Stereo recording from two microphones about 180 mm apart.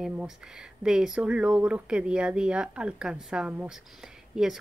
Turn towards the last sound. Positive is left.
turn(degrees=0)  # may be behind; listen again after turning